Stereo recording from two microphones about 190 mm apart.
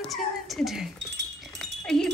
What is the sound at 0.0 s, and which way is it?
Speech, centre (ahead or behind).